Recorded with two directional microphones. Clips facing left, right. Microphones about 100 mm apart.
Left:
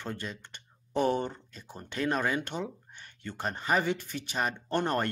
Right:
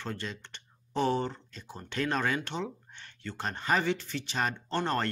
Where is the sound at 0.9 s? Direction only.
15° left (ahead or behind).